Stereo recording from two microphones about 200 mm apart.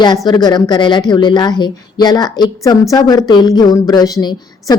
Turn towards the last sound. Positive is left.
turn(degrees=20)  # may be behind; listen again after turning